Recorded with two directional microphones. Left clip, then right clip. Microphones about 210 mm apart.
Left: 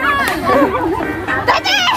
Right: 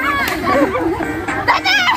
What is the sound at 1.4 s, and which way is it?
Bird, 55° left (ahead or behind).